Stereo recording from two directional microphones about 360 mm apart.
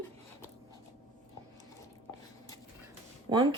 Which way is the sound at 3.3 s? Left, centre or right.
Centre.